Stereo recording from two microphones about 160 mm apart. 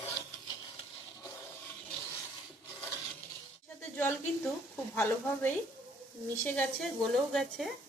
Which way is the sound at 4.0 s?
10° left (ahead or behind).